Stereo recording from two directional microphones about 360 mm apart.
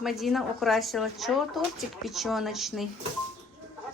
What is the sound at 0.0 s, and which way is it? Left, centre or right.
Speech, centre.